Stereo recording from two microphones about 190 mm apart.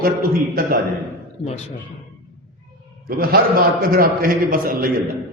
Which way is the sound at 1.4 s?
35° left (ahead or behind).